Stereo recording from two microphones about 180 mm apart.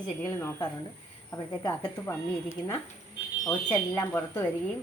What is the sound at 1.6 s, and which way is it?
Speech, 20° left (ahead or behind).